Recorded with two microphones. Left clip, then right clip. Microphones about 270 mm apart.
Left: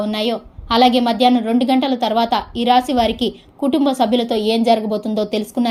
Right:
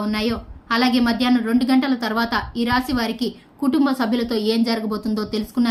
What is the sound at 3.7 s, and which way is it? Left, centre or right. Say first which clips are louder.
Speech: left 2 dB; left.